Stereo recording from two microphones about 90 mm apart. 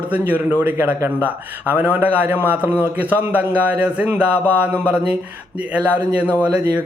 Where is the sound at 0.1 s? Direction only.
15° right (ahead or behind).